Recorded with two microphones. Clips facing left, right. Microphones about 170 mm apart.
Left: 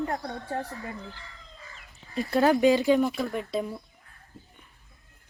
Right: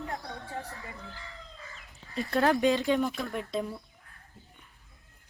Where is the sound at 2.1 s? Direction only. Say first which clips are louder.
Left 4 dB; centre (ahead or behind).